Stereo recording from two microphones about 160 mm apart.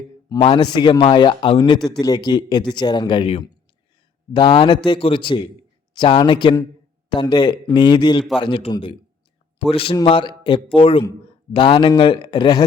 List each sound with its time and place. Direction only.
0.3 s a man's voice: 30° left (ahead or behind)